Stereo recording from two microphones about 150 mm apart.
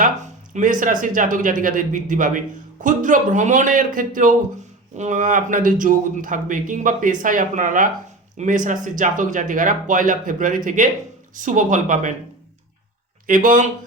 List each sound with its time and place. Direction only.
0.5 s speech: 60° right (ahead or behind)
13.2 s speech: 60° right (ahead or behind)